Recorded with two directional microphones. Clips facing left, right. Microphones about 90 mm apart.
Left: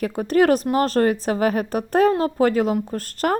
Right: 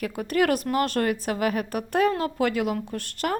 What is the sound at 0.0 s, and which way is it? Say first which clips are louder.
Speech: left 6 dB; 35° left (ahead or behind).